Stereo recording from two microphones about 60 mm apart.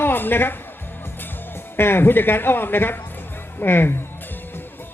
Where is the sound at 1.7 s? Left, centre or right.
Left.